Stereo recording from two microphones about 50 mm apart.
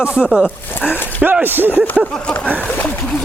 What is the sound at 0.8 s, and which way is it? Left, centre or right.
Speech, left.